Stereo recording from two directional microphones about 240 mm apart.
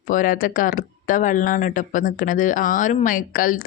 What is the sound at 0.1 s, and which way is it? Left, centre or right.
Speech, left.